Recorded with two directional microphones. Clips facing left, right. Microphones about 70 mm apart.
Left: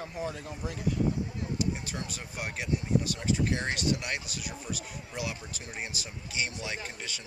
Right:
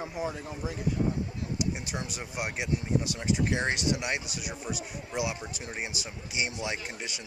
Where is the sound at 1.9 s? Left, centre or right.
Centre.